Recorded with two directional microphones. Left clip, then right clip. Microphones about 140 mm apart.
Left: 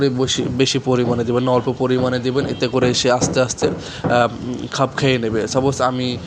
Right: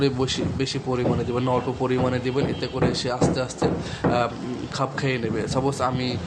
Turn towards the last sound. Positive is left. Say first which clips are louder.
# left 6 dB
turn(degrees=35)  # may be behind; listen again after turning